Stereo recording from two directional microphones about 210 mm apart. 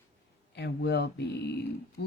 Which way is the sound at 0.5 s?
50° left (ahead or behind).